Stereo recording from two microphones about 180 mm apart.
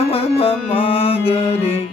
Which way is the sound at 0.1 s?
35° left (ahead or behind).